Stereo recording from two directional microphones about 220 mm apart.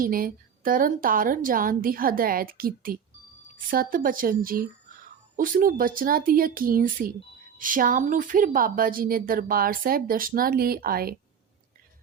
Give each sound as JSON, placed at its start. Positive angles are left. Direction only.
{"t": 0.0, "sound": "speech", "side_deg": -40}